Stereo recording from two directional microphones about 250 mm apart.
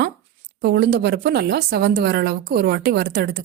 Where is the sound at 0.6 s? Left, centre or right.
Right.